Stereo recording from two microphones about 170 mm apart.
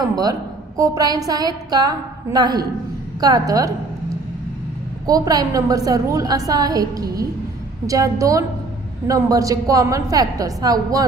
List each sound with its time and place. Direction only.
0.1 s a woman's voice: 20° right (ahead or behind)
5.0 s a woman's voice: 20° right (ahead or behind)